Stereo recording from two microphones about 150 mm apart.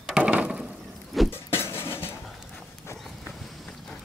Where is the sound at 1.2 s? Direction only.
15° left (ahead or behind).